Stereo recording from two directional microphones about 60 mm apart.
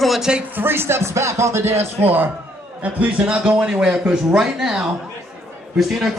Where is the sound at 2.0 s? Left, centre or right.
Right.